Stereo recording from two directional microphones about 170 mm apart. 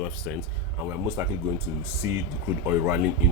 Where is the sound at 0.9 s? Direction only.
15° right (ahead or behind).